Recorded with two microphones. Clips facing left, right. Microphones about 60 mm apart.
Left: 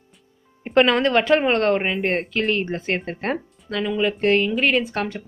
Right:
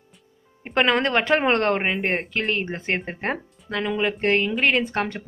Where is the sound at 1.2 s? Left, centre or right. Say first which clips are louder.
Left 2 dB; right.